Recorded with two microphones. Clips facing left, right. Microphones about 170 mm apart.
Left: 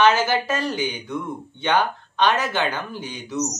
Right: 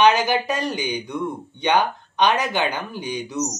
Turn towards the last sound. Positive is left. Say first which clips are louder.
# right 2 dB
turn(degrees=-15)  # may be behind; listen again after turning